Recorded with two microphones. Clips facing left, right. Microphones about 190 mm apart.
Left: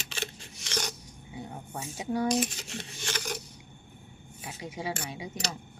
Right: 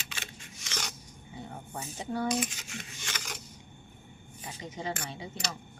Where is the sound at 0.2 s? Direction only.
35° left (ahead or behind).